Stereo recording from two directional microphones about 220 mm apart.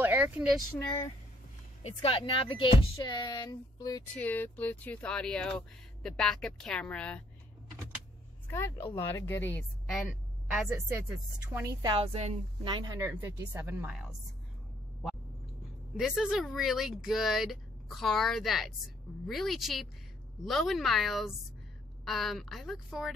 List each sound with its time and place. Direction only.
0.0 s a sound: 10° right (ahead or behind)
0.6 s a child's voice: 15° left (ahead or behind)
1.8 s speech: 30° left (ahead or behind)
4.1 s speech: 5° left (ahead or behind)
8.5 s a woman's voice: 10° left (ahead or behind)
10.9 s speech: 10° right (ahead or behind)
16.0 s speech: centre (ahead or behind)